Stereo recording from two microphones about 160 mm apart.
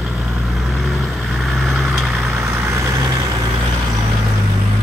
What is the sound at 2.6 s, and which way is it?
Vehicle, 20° right (ahead or behind).